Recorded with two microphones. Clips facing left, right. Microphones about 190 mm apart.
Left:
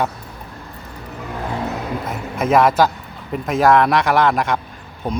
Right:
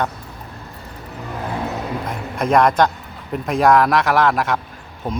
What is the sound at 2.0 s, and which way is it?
Speech, 5° left (ahead or behind).